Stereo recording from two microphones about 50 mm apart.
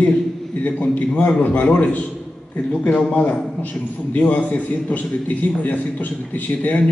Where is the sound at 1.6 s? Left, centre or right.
Centre.